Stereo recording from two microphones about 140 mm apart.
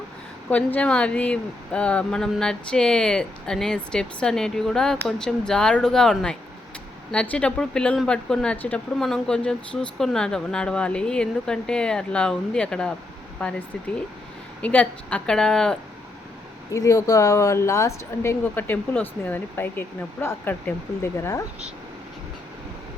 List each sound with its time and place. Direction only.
0.5 s speech: 10° left (ahead or behind)
16.7 s speech: 25° left (ahead or behind)